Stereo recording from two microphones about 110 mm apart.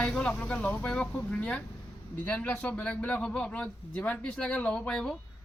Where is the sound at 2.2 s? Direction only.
15° left (ahead or behind).